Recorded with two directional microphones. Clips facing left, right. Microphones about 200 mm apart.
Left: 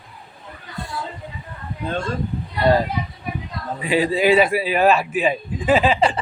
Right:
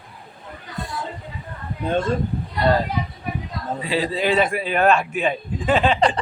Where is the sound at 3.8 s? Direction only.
15° left (ahead or behind).